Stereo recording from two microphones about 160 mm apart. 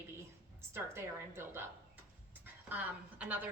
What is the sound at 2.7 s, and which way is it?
Speech, 10° right (ahead or behind).